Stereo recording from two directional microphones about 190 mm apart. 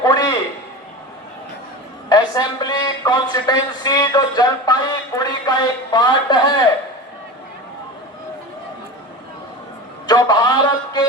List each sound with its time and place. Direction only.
0.0 s a sound: 20° left (ahead or behind)
2.0 s a man's voice: 20° left (ahead or behind)
10.1 s a man's voice: 20° left (ahead or behind)